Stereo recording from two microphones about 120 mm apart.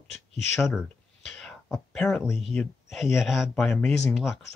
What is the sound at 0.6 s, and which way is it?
Speech, centre (ahead or behind).